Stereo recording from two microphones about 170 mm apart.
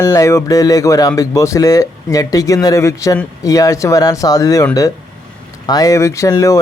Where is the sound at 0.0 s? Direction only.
20° left (ahead or behind).